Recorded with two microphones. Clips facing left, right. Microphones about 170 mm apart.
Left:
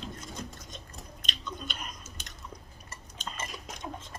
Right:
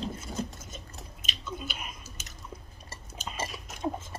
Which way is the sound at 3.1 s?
5° right (ahead or behind).